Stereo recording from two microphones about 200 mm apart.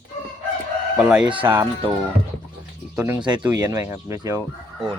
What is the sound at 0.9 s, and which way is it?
Speech, 5° right (ahead or behind).